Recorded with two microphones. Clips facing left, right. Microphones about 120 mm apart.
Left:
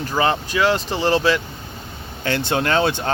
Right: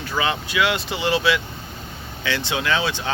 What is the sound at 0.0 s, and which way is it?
Speech, 40° left (ahead or behind).